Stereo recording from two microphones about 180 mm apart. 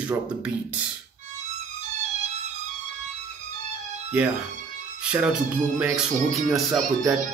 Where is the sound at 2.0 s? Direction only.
40° right (ahead or behind).